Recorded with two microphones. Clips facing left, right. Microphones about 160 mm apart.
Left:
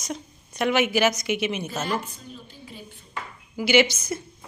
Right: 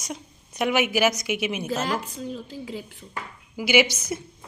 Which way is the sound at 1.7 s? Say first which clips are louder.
Right 2 dB; 90° right.